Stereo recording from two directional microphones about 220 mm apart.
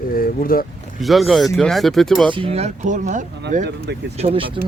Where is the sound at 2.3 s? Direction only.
25° right (ahead or behind).